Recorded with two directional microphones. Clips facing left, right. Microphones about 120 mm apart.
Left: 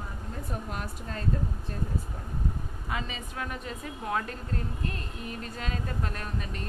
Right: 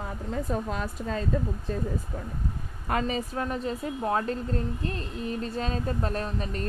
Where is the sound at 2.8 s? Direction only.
45° right (ahead or behind).